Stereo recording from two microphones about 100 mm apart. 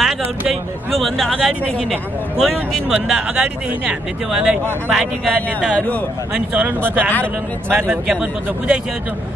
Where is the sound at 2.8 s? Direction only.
5° right (ahead or behind).